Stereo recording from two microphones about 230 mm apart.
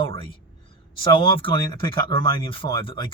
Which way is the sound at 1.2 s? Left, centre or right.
Left.